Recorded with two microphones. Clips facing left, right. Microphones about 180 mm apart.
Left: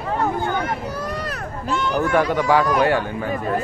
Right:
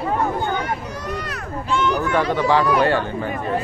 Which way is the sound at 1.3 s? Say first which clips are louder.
Right 1 dB; 40° left (ahead or behind).